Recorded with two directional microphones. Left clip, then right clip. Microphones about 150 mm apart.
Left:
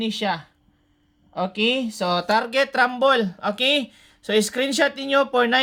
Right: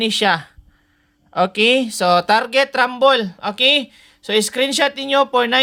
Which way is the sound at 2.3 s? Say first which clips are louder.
Right 5 dB; 25° right (ahead or behind).